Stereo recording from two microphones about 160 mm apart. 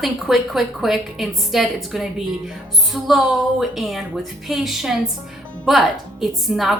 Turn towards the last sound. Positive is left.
turn(degrees=0)  # may be behind; listen again after turning